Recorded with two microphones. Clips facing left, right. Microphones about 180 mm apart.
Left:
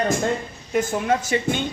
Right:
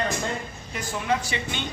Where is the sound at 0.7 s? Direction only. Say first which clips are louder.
Left 6 dB; 50° left (ahead or behind).